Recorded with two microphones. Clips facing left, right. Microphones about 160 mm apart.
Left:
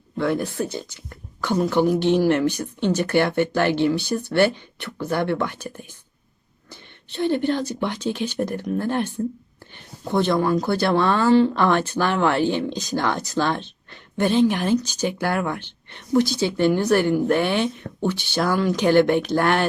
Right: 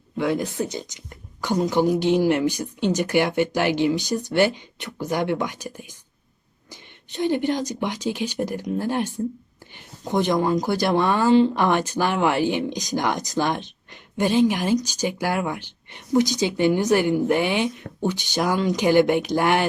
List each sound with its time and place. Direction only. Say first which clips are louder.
0.2 s speech: even; 15° right (ahead or behind)